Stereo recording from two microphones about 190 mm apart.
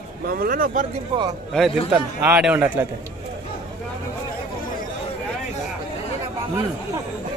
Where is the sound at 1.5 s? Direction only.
5° left (ahead or behind).